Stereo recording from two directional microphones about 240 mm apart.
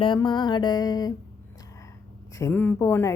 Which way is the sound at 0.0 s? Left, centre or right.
Centre.